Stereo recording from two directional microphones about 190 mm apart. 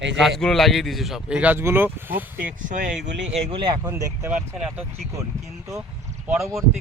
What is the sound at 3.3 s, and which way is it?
Speech, 30° right (ahead or behind).